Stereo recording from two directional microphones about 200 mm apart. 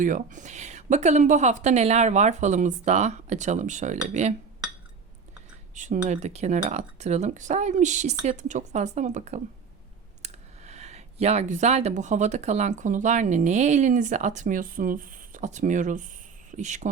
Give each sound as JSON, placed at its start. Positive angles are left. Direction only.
{"t": 0.0, "sound": "speech", "side_deg": -40}
{"t": 5.7, "sound": "speech", "side_deg": -40}